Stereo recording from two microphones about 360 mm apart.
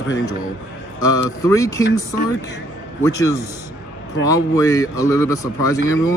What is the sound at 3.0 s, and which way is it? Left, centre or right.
A man's voice, centre.